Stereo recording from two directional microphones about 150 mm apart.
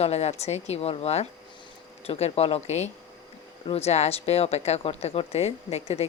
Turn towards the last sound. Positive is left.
turn(degrees=45)  # may be behind; listen again after turning